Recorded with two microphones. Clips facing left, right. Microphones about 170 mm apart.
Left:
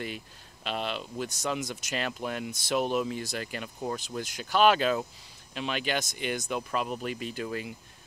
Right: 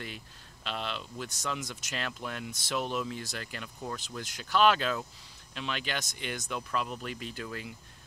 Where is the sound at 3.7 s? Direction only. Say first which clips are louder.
Left 5 dB; 25° left (ahead or behind).